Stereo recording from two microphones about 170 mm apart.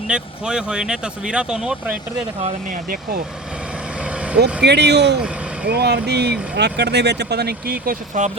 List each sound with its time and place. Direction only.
0.1 s speech: 5° right (ahead or behind)
2.4 s speech: 55° right (ahead or behind)
4.0 s vehicle: 5° right (ahead or behind)
4.6 s speech: 85° right; by 8.3 s 50° right (ahead or behind)